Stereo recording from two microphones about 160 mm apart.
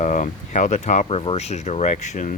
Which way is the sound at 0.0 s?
50° left (ahead or behind).